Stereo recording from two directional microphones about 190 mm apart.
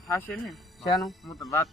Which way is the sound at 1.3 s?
15° left (ahead or behind).